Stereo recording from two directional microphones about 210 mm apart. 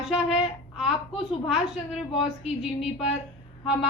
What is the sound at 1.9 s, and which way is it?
A woman's voice, centre (ahead or behind).